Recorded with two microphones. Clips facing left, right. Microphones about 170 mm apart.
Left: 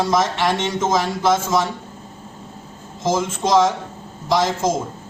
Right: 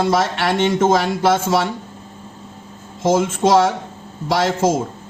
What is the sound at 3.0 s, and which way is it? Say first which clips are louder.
Speech: right 5 dB; 60° right (ahead or behind).